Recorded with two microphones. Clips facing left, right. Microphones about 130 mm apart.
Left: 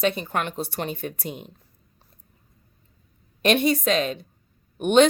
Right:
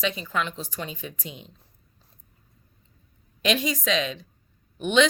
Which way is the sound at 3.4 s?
55° left (ahead or behind).